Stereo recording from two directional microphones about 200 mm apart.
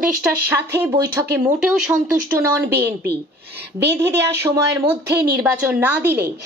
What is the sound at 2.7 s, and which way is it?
A woman's voice, 55° right (ahead or behind).